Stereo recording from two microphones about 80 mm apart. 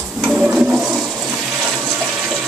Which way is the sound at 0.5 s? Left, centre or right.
Centre.